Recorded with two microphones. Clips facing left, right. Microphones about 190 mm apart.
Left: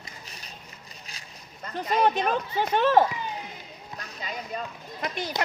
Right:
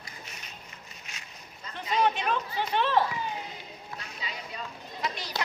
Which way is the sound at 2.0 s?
40° left (ahead or behind).